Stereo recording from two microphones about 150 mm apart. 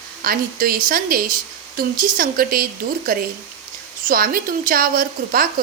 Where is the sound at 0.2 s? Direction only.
75° right (ahead or behind).